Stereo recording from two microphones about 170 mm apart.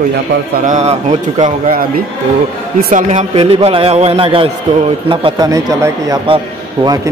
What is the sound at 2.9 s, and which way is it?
A man's voice, 45° right (ahead or behind).